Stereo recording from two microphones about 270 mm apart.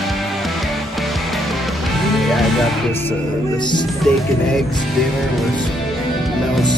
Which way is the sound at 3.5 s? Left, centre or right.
Centre.